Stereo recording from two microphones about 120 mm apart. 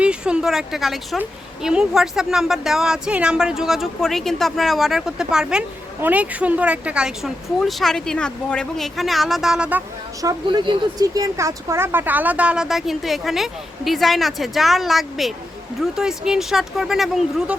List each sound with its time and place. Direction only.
0.0 s a woman's voice: 10° right (ahead or behind)
10.4 s a woman's voice: 40° right (ahead or behind); by 17.6 s 5° right (ahead or behind)